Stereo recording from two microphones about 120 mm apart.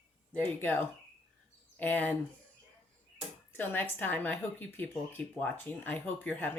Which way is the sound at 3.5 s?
15° left (ahead or behind).